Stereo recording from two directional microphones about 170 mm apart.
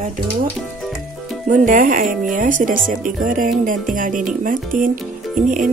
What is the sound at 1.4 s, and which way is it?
Speech, 55° right (ahead or behind).